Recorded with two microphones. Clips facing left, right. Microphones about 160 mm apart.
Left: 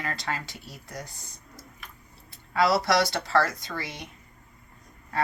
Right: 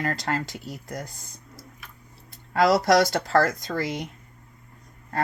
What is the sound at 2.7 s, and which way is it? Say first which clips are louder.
Speech: right 4 dB; 45° right (ahead or behind).